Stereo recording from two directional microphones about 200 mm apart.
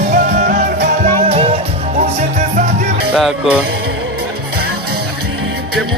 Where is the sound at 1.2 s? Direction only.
30° right (ahead or behind).